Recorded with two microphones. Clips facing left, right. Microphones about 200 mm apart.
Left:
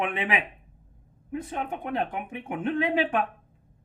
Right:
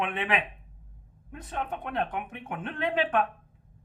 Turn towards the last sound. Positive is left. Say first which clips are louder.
# left 2 dB
turn(degrees=10)  # may be behind; listen again after turning